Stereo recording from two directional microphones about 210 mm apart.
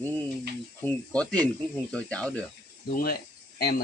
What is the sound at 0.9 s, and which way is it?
Speech, 5° left (ahead or behind).